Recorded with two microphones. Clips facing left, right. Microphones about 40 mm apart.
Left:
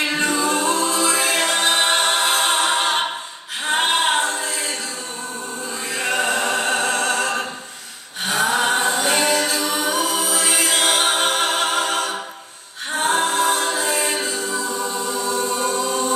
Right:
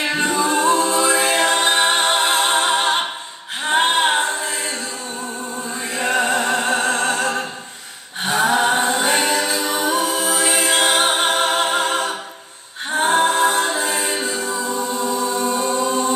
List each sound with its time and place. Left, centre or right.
0.2 s a capella: right
5.9 s music: right
8.3 s a capella: right
10.2 s music: right
12.9 s a capella: right